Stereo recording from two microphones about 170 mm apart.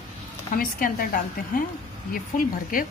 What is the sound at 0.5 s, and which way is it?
A woman's voice, 60° left (ahead or behind).